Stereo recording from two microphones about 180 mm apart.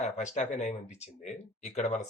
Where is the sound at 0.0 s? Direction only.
40° left (ahead or behind).